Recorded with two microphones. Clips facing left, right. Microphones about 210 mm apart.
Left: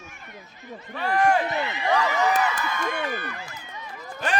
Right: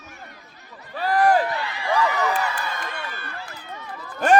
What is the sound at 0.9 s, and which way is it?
Speech, 35° right (ahead or behind).